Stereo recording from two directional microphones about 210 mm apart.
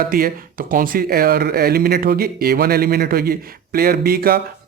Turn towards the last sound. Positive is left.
turn(degrees=-45)  # may be behind; listen again after turning